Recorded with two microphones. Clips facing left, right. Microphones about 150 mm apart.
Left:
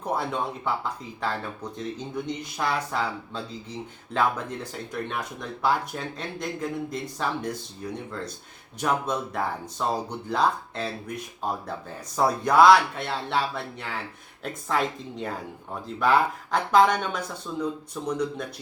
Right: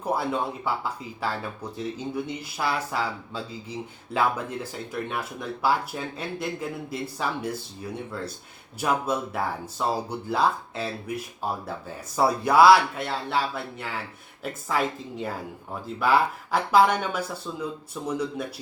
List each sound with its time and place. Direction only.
0.0 s speech: 5° right (ahead or behind)